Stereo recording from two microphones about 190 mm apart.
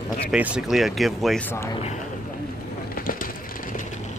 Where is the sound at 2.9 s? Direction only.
45° left (ahead or behind).